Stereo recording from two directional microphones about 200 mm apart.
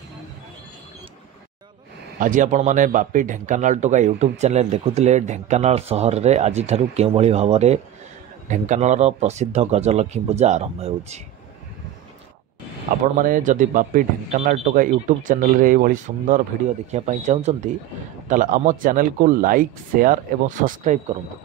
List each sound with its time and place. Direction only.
2.1 s speech: 40° right (ahead or behind)
12.9 s speech: 40° right (ahead or behind)